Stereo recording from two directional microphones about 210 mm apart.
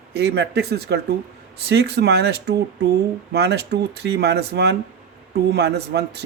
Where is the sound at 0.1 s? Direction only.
50° right (ahead or behind).